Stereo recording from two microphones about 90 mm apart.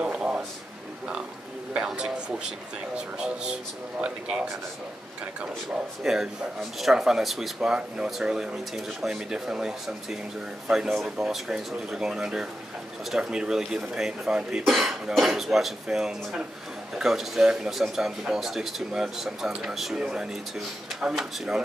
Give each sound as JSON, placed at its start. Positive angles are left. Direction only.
{"t": 0.0, "sound": "a sound", "side_deg": -10}
{"t": 1.7, "sound": "speech", "side_deg": -10}
{"t": 6.0, "sound": "speech", "side_deg": -5}